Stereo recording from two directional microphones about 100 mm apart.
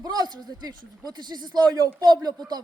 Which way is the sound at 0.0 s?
40° right (ahead or behind).